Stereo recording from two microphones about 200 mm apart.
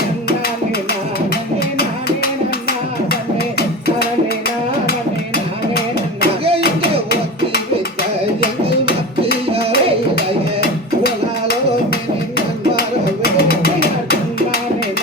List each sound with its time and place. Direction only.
4.4 s music: 50° left (ahead or behind)
9.5 s music: 30° right (ahead or behind)
13.2 s a sound: 50° left (ahead or behind)